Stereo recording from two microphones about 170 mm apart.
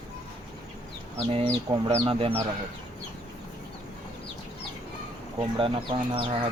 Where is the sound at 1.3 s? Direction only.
30° right (ahead or behind).